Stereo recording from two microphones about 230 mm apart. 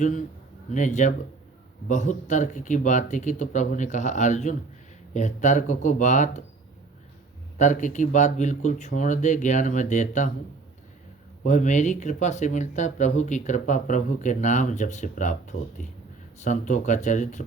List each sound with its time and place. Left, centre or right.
0.0 s speech: left
7.6 s speech: left
11.4 s speech: left